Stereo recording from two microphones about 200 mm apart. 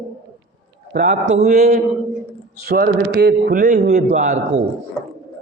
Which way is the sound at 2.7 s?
50° right (ahead or behind).